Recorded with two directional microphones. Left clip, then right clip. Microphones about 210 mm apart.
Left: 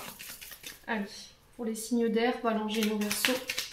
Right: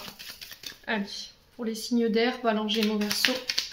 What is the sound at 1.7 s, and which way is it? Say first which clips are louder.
Speech: right 3 dB; 45° right (ahead or behind).